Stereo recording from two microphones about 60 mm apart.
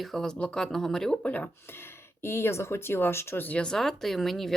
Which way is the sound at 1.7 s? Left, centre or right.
Left.